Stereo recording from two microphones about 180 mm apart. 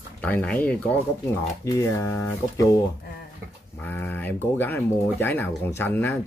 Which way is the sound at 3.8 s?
10° left (ahead or behind).